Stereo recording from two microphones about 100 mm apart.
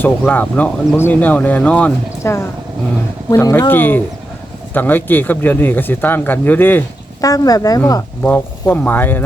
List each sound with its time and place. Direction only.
0.0 s speech: 15° left (ahead or behind)
2.2 s speech: 25° left (ahead or behind)
3.7 s speech: 20° left (ahead or behind)
7.2 s speech: 35° left (ahead or behind)
8.2 s speech: 15° left (ahead or behind)